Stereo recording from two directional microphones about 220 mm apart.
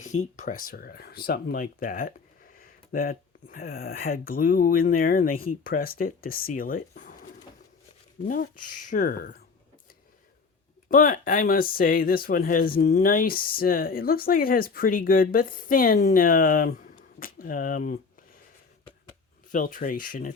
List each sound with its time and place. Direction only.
0.0 s speech: 35° left (ahead or behind)
10.8 s speech: 40° left (ahead or behind)
19.5 s speech: 35° left (ahead or behind)